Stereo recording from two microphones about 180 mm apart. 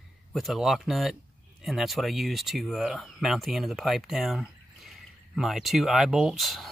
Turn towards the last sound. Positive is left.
turn(degrees=0)  # may be behind; listen again after turning